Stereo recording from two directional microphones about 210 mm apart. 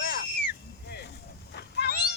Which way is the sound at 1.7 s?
50° left (ahead or behind).